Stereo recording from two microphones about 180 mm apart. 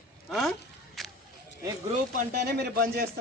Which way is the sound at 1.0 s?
Centre (ahead or behind).